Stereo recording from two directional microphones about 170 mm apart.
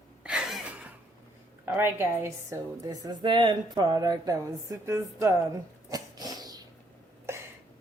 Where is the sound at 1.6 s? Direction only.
10° right (ahead or behind).